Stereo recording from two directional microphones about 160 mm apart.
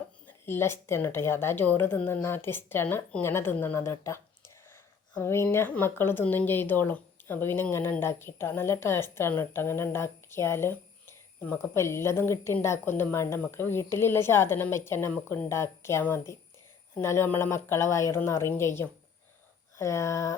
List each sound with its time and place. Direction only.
0.3 s speech: 15° left (ahead or behind)